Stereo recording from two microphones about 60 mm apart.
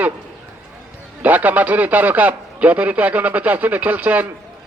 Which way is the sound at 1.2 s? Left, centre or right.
Right.